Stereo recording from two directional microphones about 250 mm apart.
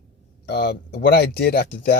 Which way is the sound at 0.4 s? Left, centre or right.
Left.